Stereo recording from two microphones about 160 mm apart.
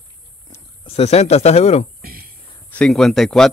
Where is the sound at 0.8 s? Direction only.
40° left (ahead or behind).